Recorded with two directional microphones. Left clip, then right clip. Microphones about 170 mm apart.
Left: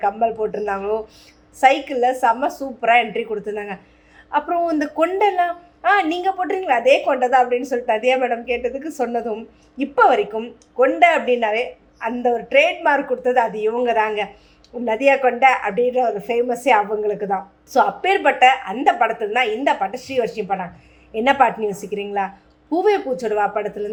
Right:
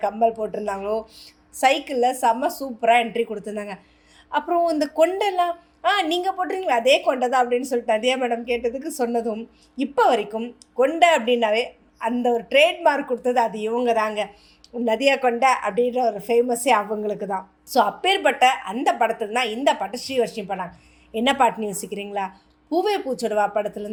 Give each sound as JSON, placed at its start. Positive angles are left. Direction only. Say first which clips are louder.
{"t": 0.0, "sound": "a woman's voice", "louder": "left 2 dB", "side_deg": -35}